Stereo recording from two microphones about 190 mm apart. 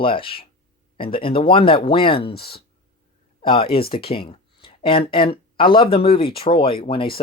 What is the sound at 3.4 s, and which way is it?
Speech, 30° left (ahead or behind).